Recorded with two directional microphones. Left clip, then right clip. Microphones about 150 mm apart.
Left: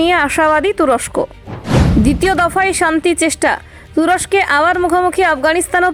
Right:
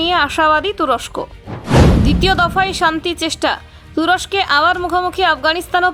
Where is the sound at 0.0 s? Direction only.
40° left (ahead or behind).